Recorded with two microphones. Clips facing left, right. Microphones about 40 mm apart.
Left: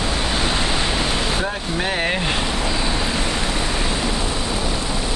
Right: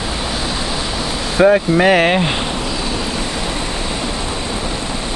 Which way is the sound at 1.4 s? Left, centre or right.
Right.